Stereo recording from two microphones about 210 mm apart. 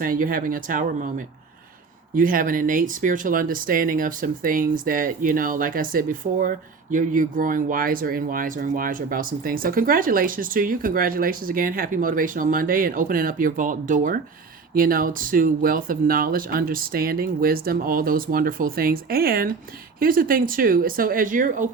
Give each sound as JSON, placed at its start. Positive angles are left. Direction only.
{"t": 0.0, "sound": "speech", "side_deg": -40}
{"t": 2.1, "sound": "speech", "side_deg": -40}